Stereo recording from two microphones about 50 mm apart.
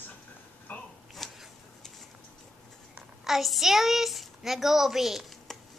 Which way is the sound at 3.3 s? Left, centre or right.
Centre.